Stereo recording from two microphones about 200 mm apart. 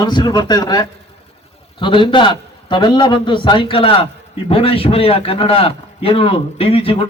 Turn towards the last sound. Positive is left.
turn(degrees=30)  # may be behind; listen again after turning